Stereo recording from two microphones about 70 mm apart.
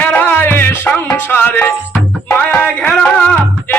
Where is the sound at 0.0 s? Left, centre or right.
Left.